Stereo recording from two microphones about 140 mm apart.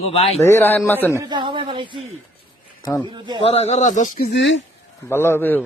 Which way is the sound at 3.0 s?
35° right (ahead or behind).